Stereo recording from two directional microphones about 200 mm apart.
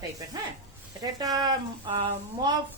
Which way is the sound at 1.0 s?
20° right (ahead or behind).